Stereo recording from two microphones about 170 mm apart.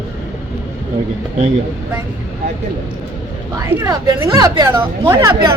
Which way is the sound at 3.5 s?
20° right (ahead or behind).